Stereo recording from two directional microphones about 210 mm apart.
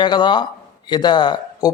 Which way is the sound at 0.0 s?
20° left (ahead or behind).